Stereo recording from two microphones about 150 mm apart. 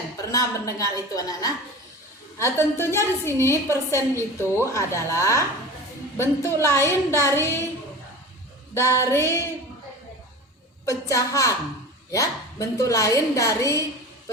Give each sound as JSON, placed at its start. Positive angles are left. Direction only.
{"t": 0.3, "sound": "a woman's voice", "side_deg": 20}
{"t": 8.9, "sound": "a woman's voice", "side_deg": 15}
{"t": 10.8, "sound": "a woman's voice", "side_deg": 20}